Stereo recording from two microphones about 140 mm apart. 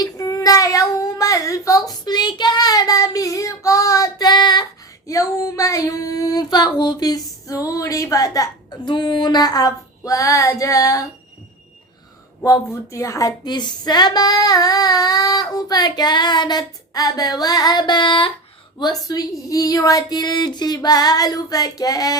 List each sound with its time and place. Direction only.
0.0 s child singing: 25° left (ahead or behind)
5.0 s female singing: 25° left (ahead or behind)
12.5 s speech: 20° left (ahead or behind)